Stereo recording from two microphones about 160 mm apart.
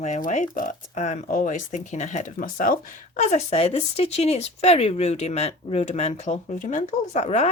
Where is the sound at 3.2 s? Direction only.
45° left (ahead or behind).